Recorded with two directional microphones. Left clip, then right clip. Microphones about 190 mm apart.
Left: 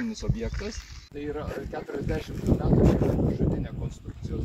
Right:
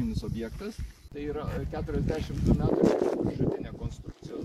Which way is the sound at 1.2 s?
30° left (ahead or behind).